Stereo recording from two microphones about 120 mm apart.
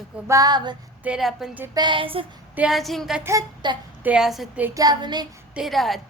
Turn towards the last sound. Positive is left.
turn(degrees=0)  # may be behind; listen again after turning